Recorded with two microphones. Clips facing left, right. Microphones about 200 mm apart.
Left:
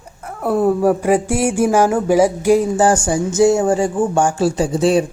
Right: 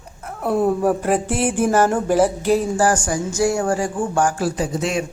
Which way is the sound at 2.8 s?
25° left (ahead or behind).